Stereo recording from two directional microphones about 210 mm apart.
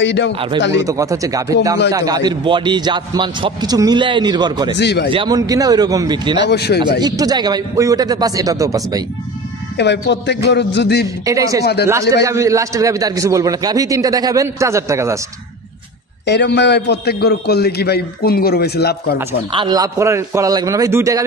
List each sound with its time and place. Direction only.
0.0 s a man's voice: 55° left (ahead or behind)
0.8 s a man's voice: 15° right (ahead or behind)
4.7 s a man's voice: 55° left (ahead or behind)
5.1 s a man's voice: 20° right (ahead or behind)
6.4 s a man's voice: 50° left (ahead or behind)
7.0 s a man's voice: 20° right (ahead or behind)
9.8 s a man's voice: 55° left (ahead or behind)
11.2 s a man's voice: 15° right (ahead or behind)
11.6 s a man's voice: 50° left (ahead or behind)
12.3 s a man's voice: 15° right (ahead or behind)
16.3 s a man's voice: 55° left (ahead or behind)
19.5 s a man's voice: 20° right (ahead or behind)